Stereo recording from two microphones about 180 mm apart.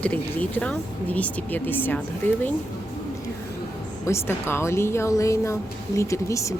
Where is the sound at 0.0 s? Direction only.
10° left (ahead or behind).